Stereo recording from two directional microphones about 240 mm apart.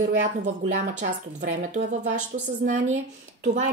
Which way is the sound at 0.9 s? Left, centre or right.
Right.